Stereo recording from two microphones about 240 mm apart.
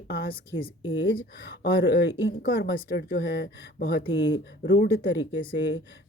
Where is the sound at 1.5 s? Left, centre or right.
Left.